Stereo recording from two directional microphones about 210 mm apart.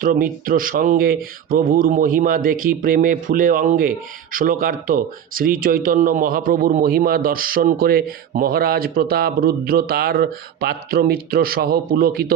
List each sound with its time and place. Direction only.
0.0 s speech: 40° right (ahead or behind)